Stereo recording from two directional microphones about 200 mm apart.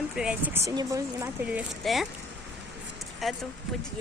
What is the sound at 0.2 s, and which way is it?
Speech, 5° right (ahead or behind).